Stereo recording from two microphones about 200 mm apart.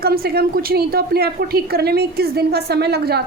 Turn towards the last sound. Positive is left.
turn(degrees=-50)  # may be behind; listen again after turning